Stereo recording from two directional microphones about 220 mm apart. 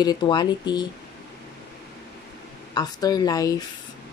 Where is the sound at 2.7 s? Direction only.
15° left (ahead or behind).